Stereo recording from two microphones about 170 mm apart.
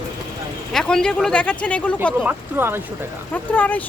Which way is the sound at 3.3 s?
10° left (ahead or behind).